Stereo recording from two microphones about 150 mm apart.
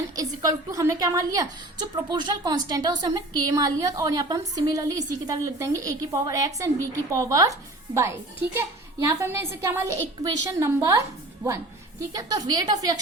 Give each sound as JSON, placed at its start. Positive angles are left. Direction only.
{"t": 0.2, "sound": "a woman's voice", "side_deg": -25}